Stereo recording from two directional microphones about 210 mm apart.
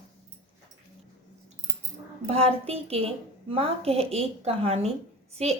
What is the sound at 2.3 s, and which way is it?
A woman's voice, 30° right (ahead or behind).